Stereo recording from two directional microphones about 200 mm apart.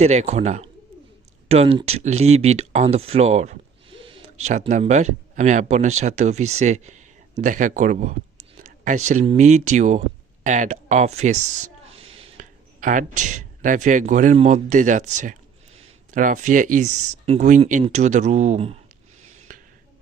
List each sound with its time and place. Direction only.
0.0 s speech: 35° right (ahead or behind)
8.6 s a sound: 40° right (ahead or behind)
9.0 s speech: 35° right (ahead or behind)
11.9 s a sound: 30° right (ahead or behind)
12.8 s speech: 40° right (ahead or behind)
19.5 s finger snapping: 40° right (ahead or behind)